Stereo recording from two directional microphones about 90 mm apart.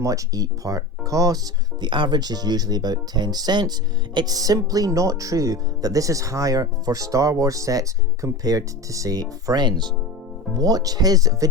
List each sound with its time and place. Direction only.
0.0 s speech: 40° right (ahead or behind)
1.8 s speech: 60° right (ahead or behind); by 9.2 s 40° right (ahead or behind)
9.5 s speech: 55° right (ahead or behind)